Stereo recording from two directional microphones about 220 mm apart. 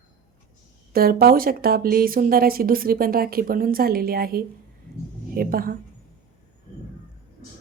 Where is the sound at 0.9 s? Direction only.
45° right (ahead or behind).